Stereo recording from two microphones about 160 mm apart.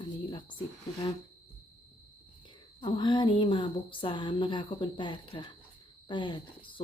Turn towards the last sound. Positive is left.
turn(degrees=30)  # may be behind; listen again after turning